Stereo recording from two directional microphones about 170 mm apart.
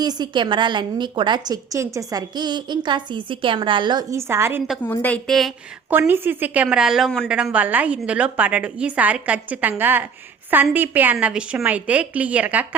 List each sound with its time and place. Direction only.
0.0 s a woman's voice: 25° right (ahead or behind)
4.8 s a woman's voice: 10° left (ahead or behind)
5.9 s a woman's voice: 10° right (ahead or behind)